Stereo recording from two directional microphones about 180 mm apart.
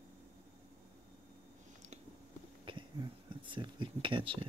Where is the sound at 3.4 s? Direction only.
25° right (ahead or behind).